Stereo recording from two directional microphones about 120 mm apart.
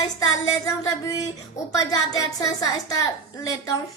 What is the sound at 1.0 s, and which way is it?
Speech, 30° left (ahead or behind).